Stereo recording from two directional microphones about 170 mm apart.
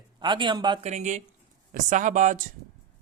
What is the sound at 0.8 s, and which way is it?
Speech, 45° right (ahead or behind).